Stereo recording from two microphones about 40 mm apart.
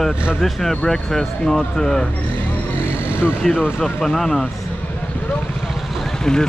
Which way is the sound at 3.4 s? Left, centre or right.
Centre.